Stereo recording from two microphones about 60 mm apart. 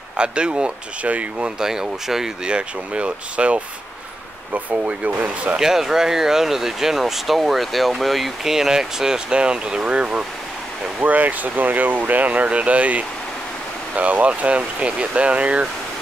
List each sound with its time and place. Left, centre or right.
0.2 s speech: centre
1.6 s speech: centre
4.6 s speech: right
5.6 s speech: centre